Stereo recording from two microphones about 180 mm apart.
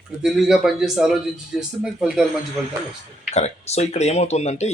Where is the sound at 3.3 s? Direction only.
40° left (ahead or behind).